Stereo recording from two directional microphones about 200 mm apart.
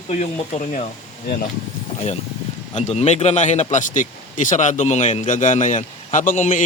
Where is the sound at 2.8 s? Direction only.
35° left (ahead or behind).